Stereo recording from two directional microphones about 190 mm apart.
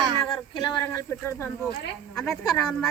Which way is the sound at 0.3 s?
25° left (ahead or behind).